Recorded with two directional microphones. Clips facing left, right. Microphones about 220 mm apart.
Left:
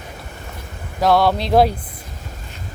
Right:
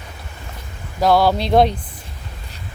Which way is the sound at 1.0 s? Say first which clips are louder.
Right 1 dB; centre (ahead or behind).